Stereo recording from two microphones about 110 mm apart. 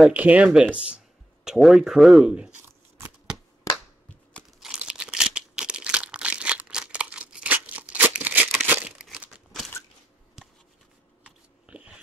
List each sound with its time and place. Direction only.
0.0 s speech: 15° right (ahead or behind)
3.7 s a sound: 30° left (ahead or behind)
4.6 s crumpling: 5° right (ahead or behind)
11.2 s biting: 10° right (ahead or behind)